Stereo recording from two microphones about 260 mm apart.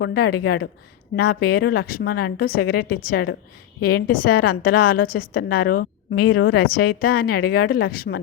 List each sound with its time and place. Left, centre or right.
0.0 s a woman's voice: left